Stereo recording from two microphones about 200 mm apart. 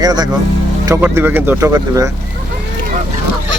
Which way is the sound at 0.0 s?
20° right (ahead or behind).